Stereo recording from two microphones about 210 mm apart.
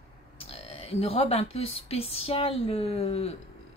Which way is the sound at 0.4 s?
30° left (ahead or behind).